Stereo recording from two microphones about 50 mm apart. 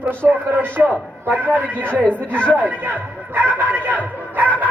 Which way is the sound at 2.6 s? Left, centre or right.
Right.